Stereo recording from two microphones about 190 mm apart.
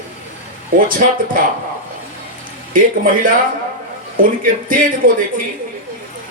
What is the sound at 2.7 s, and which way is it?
Speech, 45° right (ahead or behind).